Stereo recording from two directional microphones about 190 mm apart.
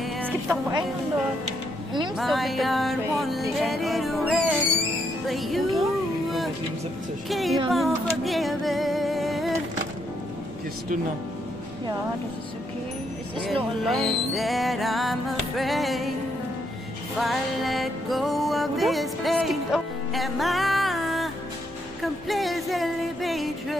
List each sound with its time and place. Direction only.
0.0 s music: 10° right (ahead or behind)
2.1 s music: centre (ahead or behind)
7.2 s music: centre (ahead or behind)
13.8 s music: centre (ahead or behind)
17.2 s music: centre (ahead or behind)